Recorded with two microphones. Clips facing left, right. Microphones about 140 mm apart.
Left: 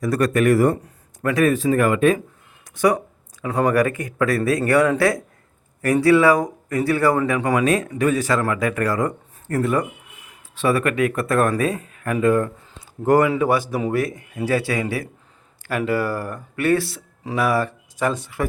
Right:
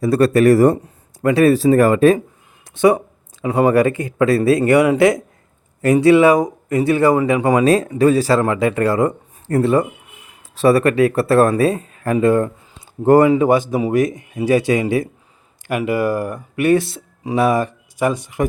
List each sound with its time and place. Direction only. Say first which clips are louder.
0.0 s speech: right 6 dB; 30° right (ahead or behind)
2.7 s speech: right 5 dB; 25° right (ahead or behind)
10.5 s speech: right 6 dB; 40° right (ahead or behind); by 18.4 s 15° right (ahead or behind)